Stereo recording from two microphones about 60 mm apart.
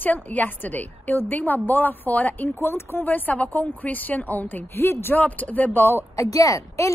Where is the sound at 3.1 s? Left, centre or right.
Left.